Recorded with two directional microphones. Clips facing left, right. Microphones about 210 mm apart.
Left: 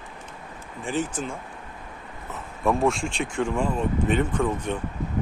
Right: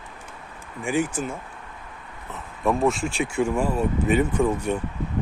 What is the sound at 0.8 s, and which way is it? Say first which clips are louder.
Speech: right 3 dB; 10° right (ahead or behind).